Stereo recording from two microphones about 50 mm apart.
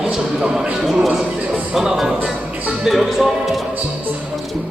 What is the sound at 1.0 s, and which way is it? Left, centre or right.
Speech, centre.